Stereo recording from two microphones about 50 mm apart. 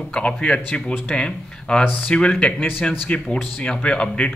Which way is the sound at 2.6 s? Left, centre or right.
Left.